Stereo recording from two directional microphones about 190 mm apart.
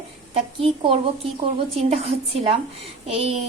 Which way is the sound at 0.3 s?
30° right (ahead or behind).